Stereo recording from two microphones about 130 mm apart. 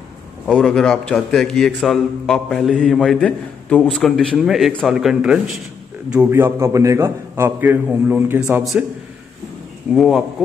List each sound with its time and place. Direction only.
0.5 s a man's voice: centre (ahead or behind); by 8.6 s 15° right (ahead or behind)
9.9 s a man's voice: centre (ahead or behind)